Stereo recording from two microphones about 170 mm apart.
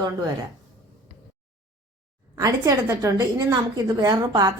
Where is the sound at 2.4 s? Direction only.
20° right (ahead or behind).